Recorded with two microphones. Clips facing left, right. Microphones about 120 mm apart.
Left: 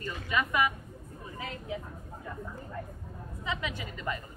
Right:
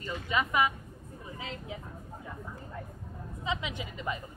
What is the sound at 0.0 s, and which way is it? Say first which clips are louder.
Speech: even; 20° right (ahead or behind).